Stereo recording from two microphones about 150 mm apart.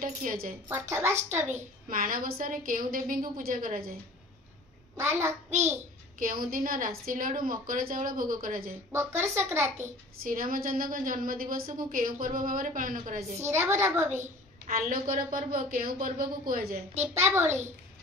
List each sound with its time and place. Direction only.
0.0 s a woman's voice: 70° right (ahead or behind)
0.7 s a woman's voice: 15° right (ahead or behind)
1.5 s a woman's voice: 65° right (ahead or behind)
6.1 s a woman's voice: 70° right (ahead or behind)
8.9 s a woman's voice: 15° right (ahead or behind)
9.8 s a woman's voice: 70° right (ahead or behind)
13.4 s a woman's voice: 15° right (ahead or behind)
14.7 s a woman's voice: 65° right (ahead or behind)
17.2 s a woman's voice: 15° right (ahead or behind)